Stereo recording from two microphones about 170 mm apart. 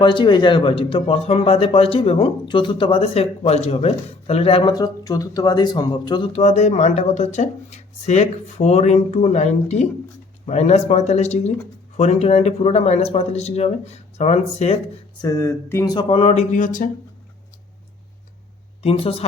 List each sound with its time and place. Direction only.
0.0 s a man's voice: 30° left (ahead or behind)
15.2 s a man's voice: 20° left (ahead or behind); by 16.9 s 50° left (ahead or behind)
18.8 s a woman's voice: 35° left (ahead or behind)